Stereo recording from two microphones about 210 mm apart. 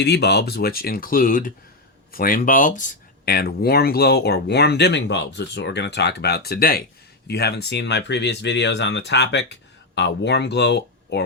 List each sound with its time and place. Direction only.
0.0 s speech: 50° left (ahead or behind)